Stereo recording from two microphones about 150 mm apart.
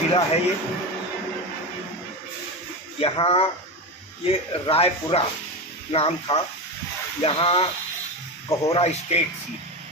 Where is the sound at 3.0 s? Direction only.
40° left (ahead or behind).